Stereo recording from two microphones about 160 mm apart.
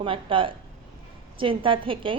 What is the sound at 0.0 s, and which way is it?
A woman's voice, 35° right (ahead or behind).